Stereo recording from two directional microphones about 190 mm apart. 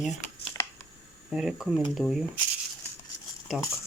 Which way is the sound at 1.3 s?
5° right (ahead or behind).